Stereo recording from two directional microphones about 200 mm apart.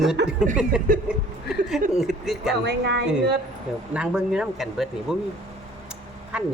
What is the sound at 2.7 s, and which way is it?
Speech, 60° right (ahead or behind).